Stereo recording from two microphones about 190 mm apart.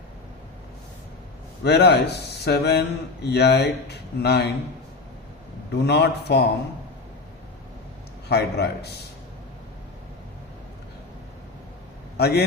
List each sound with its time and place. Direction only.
1.6 s speech: 60° left (ahead or behind)
5.7 s speech: 60° left (ahead or behind)
8.3 s speech: 60° left (ahead or behind)
12.1 s speech: 60° left (ahead or behind)